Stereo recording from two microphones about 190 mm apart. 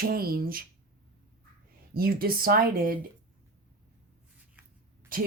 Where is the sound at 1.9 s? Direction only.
50° right (ahead or behind).